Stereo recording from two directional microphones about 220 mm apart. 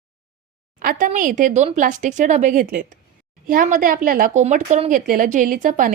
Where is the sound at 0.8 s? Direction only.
40° right (ahead or behind).